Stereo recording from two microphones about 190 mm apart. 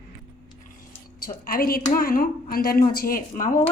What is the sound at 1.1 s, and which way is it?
A woman's voice, 50° left (ahead or behind).